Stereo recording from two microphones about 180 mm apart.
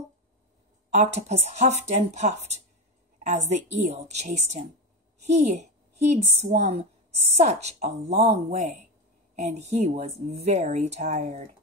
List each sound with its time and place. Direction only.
0.8 s a woman's voice: 40° right (ahead or behind)